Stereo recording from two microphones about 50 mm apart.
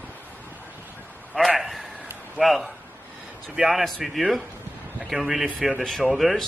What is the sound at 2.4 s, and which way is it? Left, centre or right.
Speech, centre.